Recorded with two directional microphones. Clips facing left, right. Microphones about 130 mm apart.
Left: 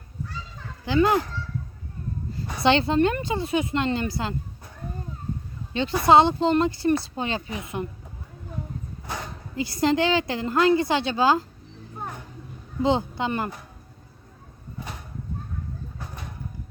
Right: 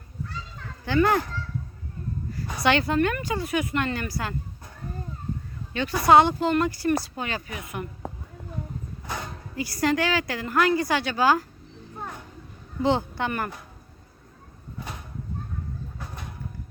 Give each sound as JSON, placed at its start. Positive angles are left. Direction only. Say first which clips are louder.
{"t": 0.9, "sound": "speech", "louder": "left 1 dB", "side_deg": 20}
{"t": 2.3, "sound": "speech", "louder": "left 2 dB", "side_deg": 25}
{"t": 5.7, "sound": "speech", "louder": "even", "side_deg": 25}
{"t": 9.6, "sound": "speech", "louder": "left 2 dB", "side_deg": 20}
{"t": 12.8, "sound": "speech", "louder": "left 1 dB", "side_deg": 20}